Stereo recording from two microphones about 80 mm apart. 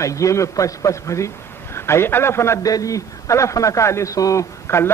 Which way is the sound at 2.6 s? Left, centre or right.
Left.